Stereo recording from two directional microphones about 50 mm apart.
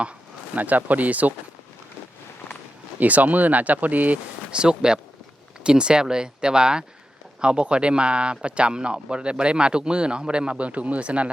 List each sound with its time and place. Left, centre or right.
0.5 s speech: right
3.0 s speech: right
4.5 s speech: centre